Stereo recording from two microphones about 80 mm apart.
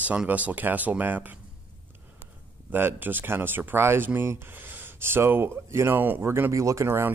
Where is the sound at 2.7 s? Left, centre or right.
Right.